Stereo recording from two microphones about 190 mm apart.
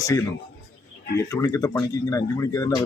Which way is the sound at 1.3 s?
15° left (ahead or behind).